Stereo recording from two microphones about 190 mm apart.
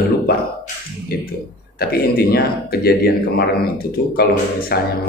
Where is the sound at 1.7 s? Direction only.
55° left (ahead or behind).